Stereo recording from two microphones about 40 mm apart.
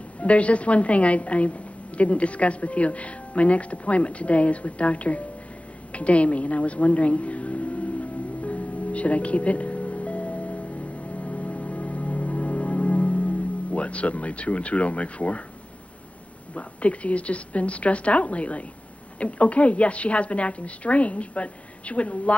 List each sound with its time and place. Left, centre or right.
0.2 s a woman's voice: left
5.9 s a sound: left
13.7 s a woman's voice: left
16.5 s a woman's voice: left